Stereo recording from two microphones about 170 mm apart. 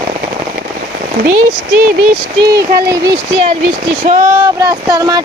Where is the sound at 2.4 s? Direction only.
20° right (ahead or behind).